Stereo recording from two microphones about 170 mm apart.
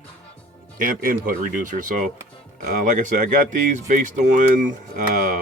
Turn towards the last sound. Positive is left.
turn(degrees=-50)  # may be behind; listen again after turning